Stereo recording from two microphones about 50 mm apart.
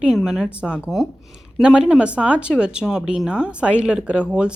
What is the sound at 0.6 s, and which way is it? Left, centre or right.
Speech, centre.